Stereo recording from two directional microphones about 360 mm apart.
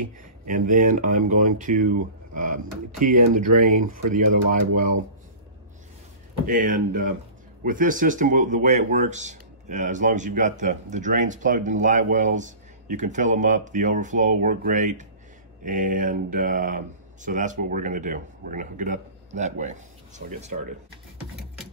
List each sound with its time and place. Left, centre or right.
0.2 s speech: right
6.4 s speech: right